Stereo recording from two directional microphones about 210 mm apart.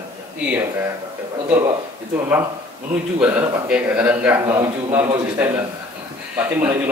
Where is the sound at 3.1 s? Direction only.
5° right (ahead or behind).